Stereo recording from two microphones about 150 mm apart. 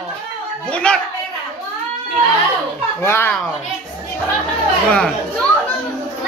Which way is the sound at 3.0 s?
15° left (ahead or behind).